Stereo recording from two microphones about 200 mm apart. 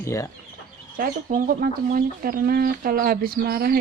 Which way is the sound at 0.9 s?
45° right (ahead or behind).